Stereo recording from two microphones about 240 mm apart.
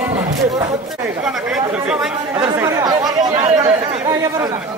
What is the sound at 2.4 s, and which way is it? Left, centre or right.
Chatter, centre.